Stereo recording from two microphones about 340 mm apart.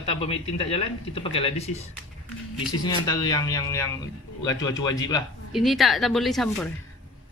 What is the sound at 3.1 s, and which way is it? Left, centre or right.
Speech, centre.